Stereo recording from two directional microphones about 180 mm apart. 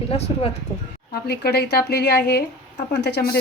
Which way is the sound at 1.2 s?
65° left (ahead or behind).